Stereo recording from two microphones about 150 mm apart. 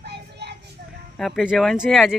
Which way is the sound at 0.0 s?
90° right.